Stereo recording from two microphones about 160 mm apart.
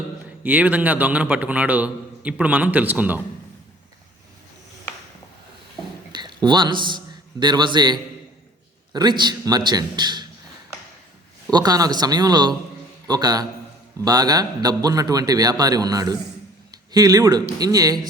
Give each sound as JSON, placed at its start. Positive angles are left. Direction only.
{"t": 0.4, "sound": "a man's voice", "side_deg": -10}
{"t": 6.1, "sound": "a man's voice", "side_deg": -30}
{"t": 11.5, "sound": "a man's voice", "side_deg": -25}